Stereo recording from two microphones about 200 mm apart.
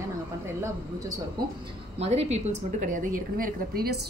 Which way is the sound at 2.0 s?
30° right (ahead or behind).